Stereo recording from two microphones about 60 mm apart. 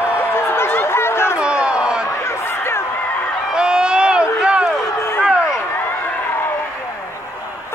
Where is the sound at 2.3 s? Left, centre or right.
Left.